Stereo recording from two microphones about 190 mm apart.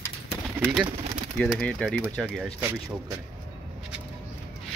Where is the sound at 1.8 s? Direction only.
5° right (ahead or behind).